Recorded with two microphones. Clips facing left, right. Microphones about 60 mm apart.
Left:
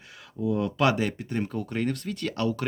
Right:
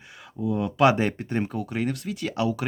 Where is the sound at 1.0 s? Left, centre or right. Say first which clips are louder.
Right 3 dB; right.